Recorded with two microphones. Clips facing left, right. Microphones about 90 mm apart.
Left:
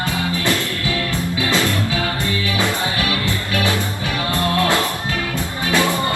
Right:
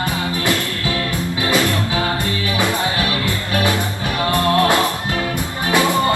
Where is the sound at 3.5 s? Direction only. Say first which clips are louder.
Right 2 dB; 20° right (ahead or behind).